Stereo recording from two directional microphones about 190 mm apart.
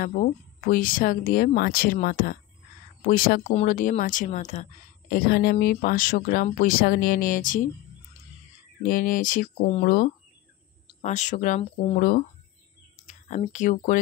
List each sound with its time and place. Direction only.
0.0 s speech: 45° left (ahead or behind)
8.8 s speech: 45° left (ahead or behind)
12.0 s speech: 50° left (ahead or behind)